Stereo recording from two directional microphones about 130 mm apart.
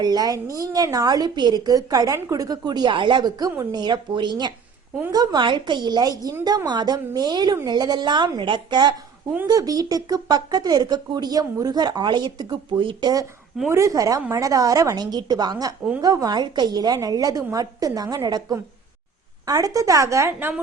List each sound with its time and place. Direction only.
0.0 s a woman's voice: 30° right (ahead or behind)
13.7 s a woman's voice: 25° right (ahead or behind)
19.5 s a woman's voice: 30° right (ahead or behind)